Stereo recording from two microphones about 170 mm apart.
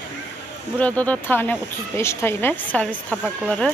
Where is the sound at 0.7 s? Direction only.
10° left (ahead or behind).